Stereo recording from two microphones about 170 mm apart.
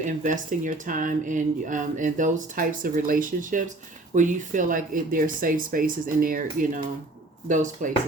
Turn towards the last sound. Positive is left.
turn(degrees=-50)  # may be behind; listen again after turning